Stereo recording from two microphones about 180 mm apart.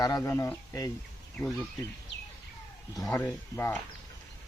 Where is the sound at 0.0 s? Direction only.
20° left (ahead or behind).